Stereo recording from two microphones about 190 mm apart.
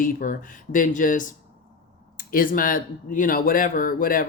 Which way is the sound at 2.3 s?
45° left (ahead or behind).